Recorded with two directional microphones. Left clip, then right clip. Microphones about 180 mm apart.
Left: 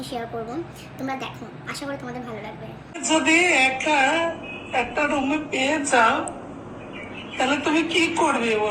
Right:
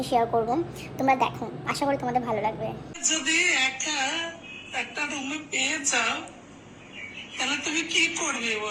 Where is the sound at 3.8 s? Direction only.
50° right (ahead or behind).